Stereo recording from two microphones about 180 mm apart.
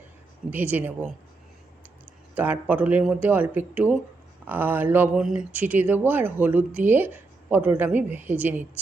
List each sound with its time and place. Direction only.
0.5 s speech: 10° right (ahead or behind)
2.3 s speech: 10° right (ahead or behind)